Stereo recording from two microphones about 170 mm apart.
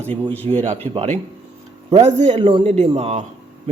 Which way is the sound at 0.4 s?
35° right (ahead or behind).